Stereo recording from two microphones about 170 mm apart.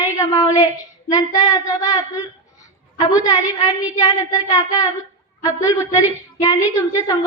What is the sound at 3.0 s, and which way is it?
Speech, 20° left (ahead or behind).